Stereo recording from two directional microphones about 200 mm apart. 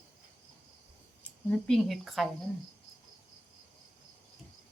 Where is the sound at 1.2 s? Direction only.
Centre (ahead or behind).